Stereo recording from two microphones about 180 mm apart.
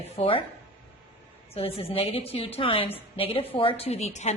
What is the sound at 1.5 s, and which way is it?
A woman's voice, 30° left (ahead or behind).